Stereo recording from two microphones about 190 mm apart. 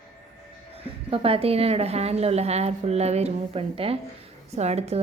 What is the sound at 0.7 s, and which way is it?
A woman's voice, 30° right (ahead or behind).